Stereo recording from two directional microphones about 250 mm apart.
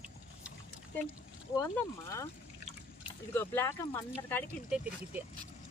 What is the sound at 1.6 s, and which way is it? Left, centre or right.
Speech, centre.